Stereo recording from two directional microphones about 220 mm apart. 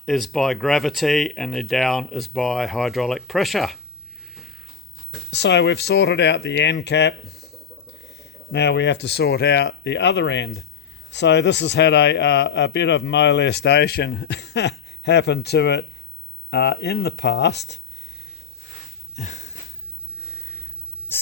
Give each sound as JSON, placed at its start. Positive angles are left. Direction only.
{"t": 0.0, "sound": "speech", "side_deg": 0}
{"t": 4.4, "sound": "a sound", "side_deg": 0}
{"t": 5.3, "sound": "a man's voice", "side_deg": 55}
{"t": 19.1, "sound": "a sound", "side_deg": 30}
{"t": 20.3, "sound": "sniff", "side_deg": 15}
{"t": 21.1, "sound": "snake", "side_deg": 10}